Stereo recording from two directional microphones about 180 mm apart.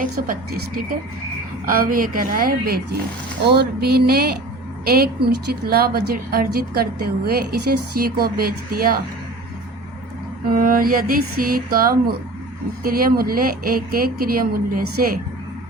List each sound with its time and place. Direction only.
0.0 s a woman's voice: 50° right (ahead or behind)
10.5 s speech: 50° right (ahead or behind)